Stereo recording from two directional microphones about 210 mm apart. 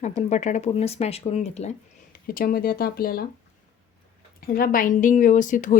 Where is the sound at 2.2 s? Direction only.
45° left (ahead or behind).